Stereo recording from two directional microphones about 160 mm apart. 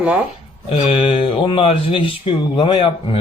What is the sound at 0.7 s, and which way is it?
Speech, 35° left (ahead or behind).